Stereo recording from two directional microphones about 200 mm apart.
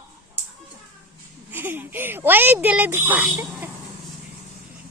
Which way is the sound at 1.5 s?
10° right (ahead or behind).